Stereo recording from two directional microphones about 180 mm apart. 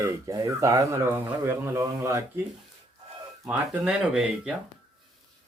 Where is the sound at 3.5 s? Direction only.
5° right (ahead or behind).